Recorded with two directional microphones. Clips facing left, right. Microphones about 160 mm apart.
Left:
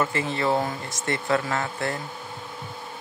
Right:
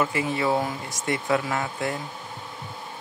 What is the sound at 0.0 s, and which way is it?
Speech, 10° right (ahead or behind).